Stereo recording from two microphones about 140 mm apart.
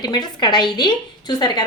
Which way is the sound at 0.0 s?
30° left (ahead or behind).